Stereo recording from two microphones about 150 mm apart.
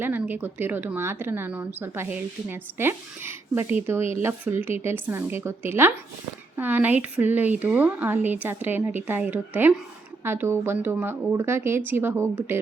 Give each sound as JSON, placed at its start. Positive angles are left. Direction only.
{"t": 0.0, "sound": "speech", "side_deg": -15}